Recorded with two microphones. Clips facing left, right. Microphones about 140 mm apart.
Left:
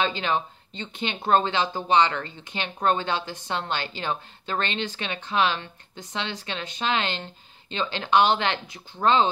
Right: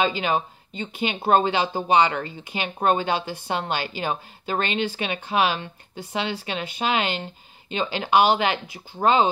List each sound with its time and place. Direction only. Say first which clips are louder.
0.0 s speech: right 3 dB; 10° right (ahead or behind)